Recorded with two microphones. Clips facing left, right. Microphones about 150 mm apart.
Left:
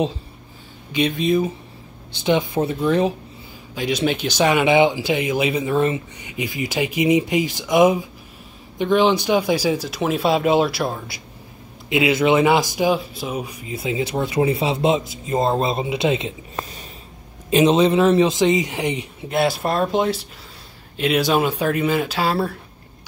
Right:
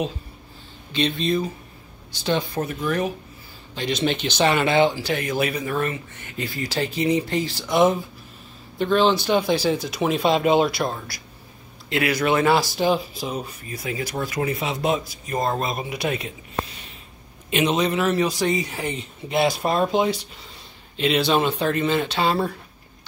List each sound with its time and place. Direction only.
0.9 s speech: 10° left (ahead or behind); by 3.1 s 30° left (ahead or behind)
3.7 s speech: 5° left (ahead or behind)
11.9 s speech: 20° left (ahead or behind)
17.5 s speech: 30° left (ahead or behind); by 19.0 s 15° left (ahead or behind)
19.2 s speech: centre (ahead or behind)